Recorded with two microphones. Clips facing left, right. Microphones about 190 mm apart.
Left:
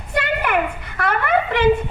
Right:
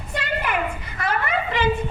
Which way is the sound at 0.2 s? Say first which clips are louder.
Left 5 dB; 60° left (ahead or behind).